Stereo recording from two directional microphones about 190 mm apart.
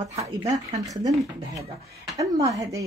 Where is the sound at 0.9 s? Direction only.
20° right (ahead or behind).